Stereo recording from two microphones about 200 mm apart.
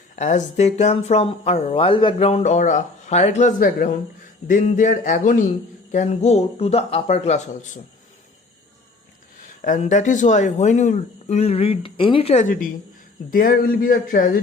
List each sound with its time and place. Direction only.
0.2 s speech: 35° left (ahead or behind)
9.6 s speech: 40° left (ahead or behind)